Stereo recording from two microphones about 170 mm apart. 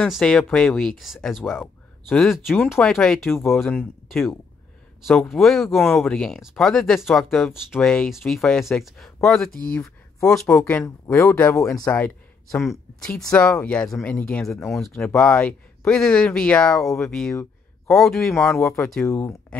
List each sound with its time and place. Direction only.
0.0 s speech: 5° left (ahead or behind)
2.5 s speech: 10° left (ahead or behind)
10.6 s speech: 15° left (ahead or behind)
19.0 s speech: 15° left (ahead or behind)